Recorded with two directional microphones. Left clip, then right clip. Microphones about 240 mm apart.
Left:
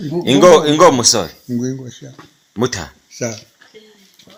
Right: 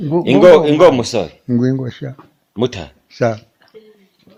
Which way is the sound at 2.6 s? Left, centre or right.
Centre.